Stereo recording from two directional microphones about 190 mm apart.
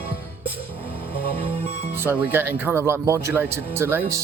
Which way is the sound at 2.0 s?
10° right (ahead or behind).